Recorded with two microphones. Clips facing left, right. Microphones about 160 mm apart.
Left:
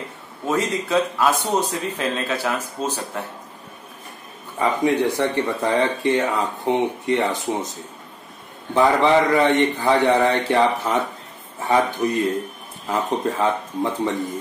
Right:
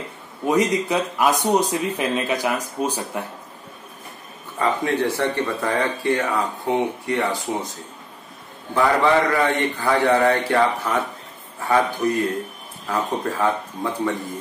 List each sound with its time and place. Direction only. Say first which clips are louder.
0.5 s speech: right 2 dB; 15° right (ahead or behind)
4.6 s speech: left 2 dB; 15° left (ahead or behind)
8.7 s speech: left 2 dB; 20° left (ahead or behind)